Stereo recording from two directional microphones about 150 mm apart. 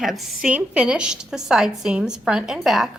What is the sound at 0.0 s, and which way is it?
A woman's voice, centre (ahead or behind).